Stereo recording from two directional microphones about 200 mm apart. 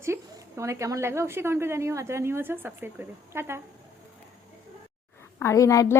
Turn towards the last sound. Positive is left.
turn(degrees=15)  # may be behind; listen again after turning